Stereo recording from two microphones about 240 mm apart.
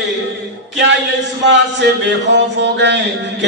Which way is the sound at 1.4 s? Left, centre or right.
Right.